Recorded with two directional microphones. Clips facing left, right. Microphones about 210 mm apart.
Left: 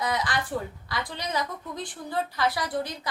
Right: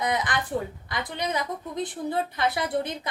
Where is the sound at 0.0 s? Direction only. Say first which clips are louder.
Right 2 dB; 20° right (ahead or behind).